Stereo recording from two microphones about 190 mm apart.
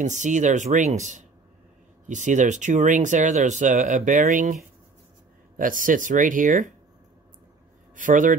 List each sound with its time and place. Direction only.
0.0 s speech: 40° right (ahead or behind)
7.9 s speech: 45° right (ahead or behind)